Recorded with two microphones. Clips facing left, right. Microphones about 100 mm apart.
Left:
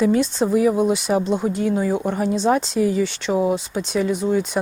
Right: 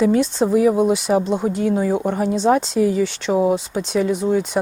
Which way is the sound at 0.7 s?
30° right (ahead or behind).